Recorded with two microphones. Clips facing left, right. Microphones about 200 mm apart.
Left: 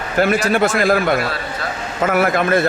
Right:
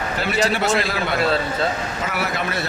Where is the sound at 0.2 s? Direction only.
50° left (ahead or behind).